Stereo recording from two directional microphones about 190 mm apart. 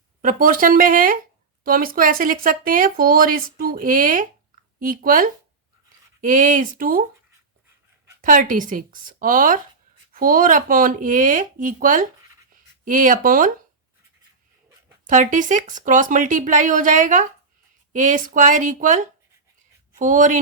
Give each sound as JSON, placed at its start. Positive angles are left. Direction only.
{"t": 0.2, "sound": "speech", "side_deg": -45}
{"t": 8.2, "sound": "speech", "side_deg": -45}
{"t": 15.0, "sound": "speech", "side_deg": -45}